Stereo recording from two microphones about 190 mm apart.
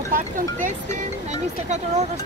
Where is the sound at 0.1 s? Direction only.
45° right (ahead or behind).